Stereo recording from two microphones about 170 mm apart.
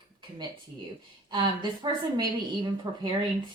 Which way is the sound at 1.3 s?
25° right (ahead or behind).